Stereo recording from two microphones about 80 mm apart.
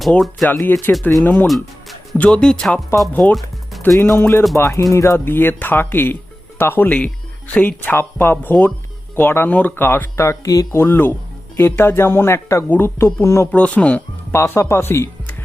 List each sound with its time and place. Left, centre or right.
0.4 s speech: left
1.5 s music: centre
2.1 s speech: centre
3.1 s speech: left
3.3 s music: centre
4.2 s speech: left
10.8 s speech: left
13.5 s speech: centre
14.3 s speech: left